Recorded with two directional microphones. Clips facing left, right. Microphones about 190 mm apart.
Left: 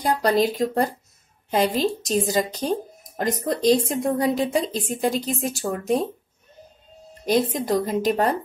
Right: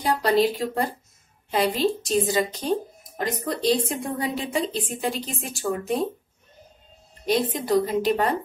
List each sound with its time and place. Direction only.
0.0 s a woman's voice: 45° left (ahead or behind)
7.2 s a woman's voice: 45° left (ahead or behind)